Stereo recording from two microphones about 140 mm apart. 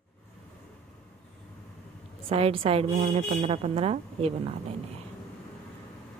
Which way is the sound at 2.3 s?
45° right (ahead or behind).